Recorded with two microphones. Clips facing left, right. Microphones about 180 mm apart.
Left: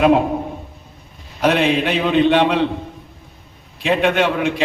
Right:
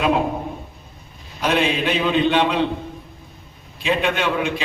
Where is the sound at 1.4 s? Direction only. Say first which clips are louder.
Left 4 dB; 65° left (ahead or behind).